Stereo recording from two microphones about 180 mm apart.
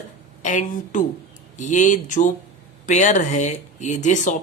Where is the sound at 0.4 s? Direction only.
45° left (ahead or behind).